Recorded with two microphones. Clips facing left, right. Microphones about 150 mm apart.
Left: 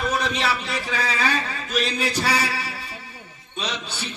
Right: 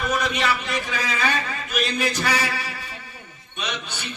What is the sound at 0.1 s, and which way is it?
A man's voice, 30° left (ahead or behind).